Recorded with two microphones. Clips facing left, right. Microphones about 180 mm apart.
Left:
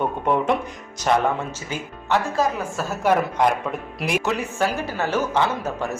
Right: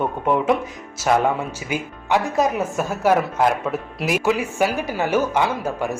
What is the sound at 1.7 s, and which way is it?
Speech, 15° right (ahead or behind).